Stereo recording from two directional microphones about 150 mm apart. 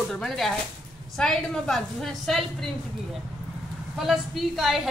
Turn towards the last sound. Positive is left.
turn(degrees=0)  # may be behind; listen again after turning